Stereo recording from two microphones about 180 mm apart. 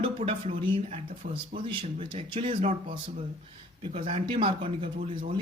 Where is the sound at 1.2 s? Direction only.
55° right (ahead or behind).